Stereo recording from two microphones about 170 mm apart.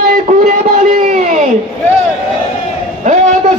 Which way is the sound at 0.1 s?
45° right (ahead or behind).